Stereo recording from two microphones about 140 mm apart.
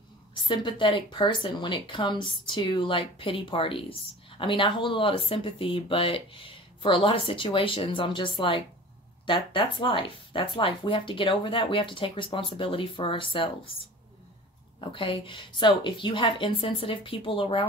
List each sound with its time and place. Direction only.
0.3 s speech: 35° left (ahead or behind)
14.8 s speech: 40° left (ahead or behind)